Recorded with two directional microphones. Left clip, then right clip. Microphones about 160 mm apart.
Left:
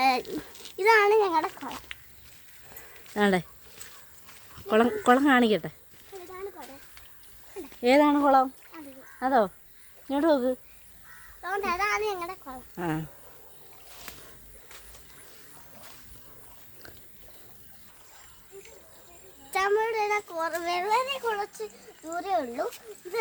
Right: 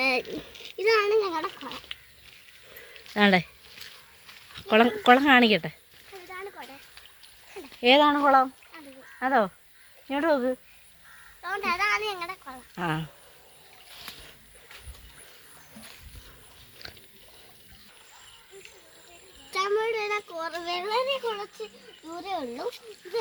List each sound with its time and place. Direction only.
0.0 s a sound: 20° left (ahead or behind)
0.9 s a child's voice: 30° left (ahead or behind)
3.2 s speech: 10° right (ahead or behind)
4.5 s a woman's voice: 5° right (ahead or behind)
6.1 s a sound: 5° right (ahead or behind)
7.8 s speech: 5° right (ahead or behind)
8.2 s a sound: 20° right (ahead or behind)
10.1 s speech: 35° right (ahead or behind)
11.4 s a woman's voice: centre (ahead or behind)
12.7 s speech: 10° right (ahead or behind)
16.8 s pig: centre (ahead or behind)
19.5 s a child's voice: 15° left (ahead or behind)
22.2 s a child's voice: 15° left (ahead or behind)